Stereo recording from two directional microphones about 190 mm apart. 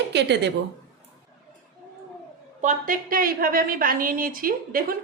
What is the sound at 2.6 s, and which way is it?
A woman's voice, 45° right (ahead or behind).